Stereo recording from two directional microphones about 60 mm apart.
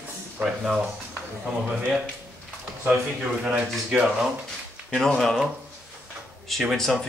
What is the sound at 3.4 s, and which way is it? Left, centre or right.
Speech, centre.